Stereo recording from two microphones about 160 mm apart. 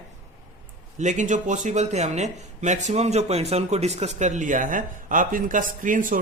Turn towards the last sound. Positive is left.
turn(degrees=-55)  # may be behind; listen again after turning